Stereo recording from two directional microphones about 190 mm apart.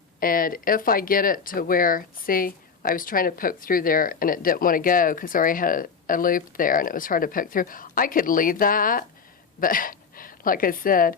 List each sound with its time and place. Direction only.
0.2 s a woman's voice: 50° left (ahead or behind)